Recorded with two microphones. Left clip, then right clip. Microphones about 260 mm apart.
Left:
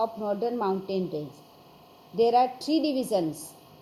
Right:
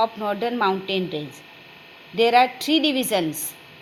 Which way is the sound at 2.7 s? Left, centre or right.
Right.